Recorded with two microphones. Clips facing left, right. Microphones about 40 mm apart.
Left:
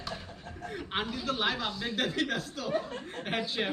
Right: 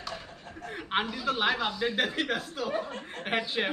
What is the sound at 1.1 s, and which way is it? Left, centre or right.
Speech, centre.